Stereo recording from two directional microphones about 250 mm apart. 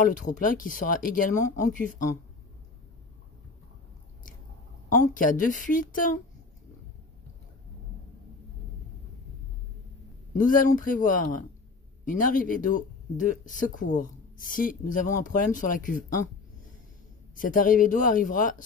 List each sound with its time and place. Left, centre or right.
0.0 s speech: left
4.9 s speech: left
10.3 s speech: left
17.4 s speech: left